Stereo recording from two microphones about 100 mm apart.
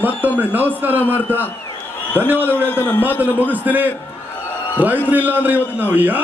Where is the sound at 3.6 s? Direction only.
15° right (ahead or behind).